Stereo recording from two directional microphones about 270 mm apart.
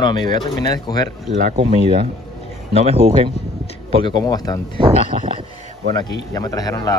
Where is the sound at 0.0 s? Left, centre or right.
Centre.